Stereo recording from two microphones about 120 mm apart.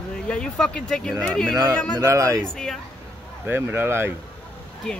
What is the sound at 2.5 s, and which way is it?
Speech, 5° left (ahead or behind).